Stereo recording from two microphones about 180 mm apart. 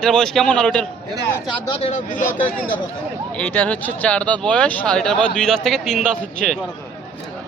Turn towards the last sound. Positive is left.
turn(degrees=5)  # may be behind; listen again after turning